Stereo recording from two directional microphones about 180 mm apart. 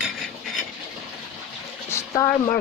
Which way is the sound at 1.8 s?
15° left (ahead or behind).